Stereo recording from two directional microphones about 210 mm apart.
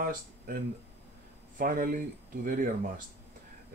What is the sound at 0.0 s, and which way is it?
Speech, 45° right (ahead or behind).